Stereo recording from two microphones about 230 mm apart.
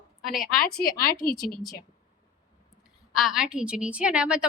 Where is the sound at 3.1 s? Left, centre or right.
Centre.